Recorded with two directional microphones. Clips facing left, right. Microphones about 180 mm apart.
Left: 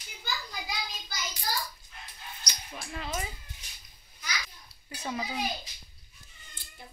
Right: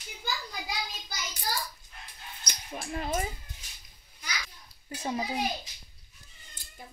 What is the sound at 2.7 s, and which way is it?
Speech, 40° right (ahead or behind).